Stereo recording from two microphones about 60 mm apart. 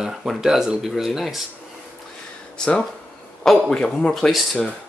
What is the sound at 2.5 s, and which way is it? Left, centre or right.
Speech, centre.